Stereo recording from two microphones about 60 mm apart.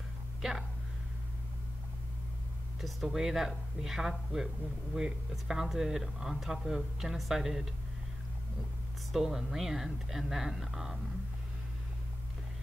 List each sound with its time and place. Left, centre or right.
0.4 s speech: centre
2.8 s speech: centre
9.1 s speech: centre